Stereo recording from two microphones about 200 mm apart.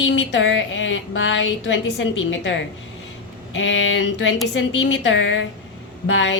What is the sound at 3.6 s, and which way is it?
A woman's voice, 75° left (ahead or behind).